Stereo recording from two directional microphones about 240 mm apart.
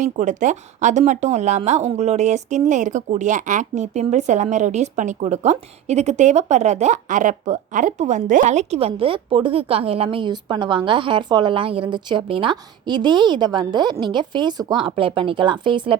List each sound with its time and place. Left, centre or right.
0.0 s a woman's voice: right